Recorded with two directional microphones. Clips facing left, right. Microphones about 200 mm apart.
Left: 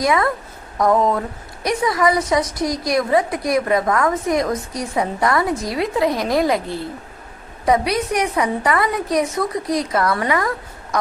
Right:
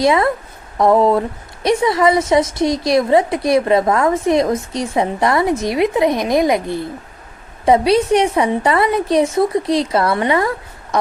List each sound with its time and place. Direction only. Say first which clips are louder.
0.0 s a woman's voice: right 4 dB; 25° right (ahead or behind)